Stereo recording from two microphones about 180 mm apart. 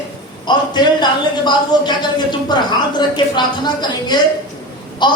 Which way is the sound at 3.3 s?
25° left (ahead or behind).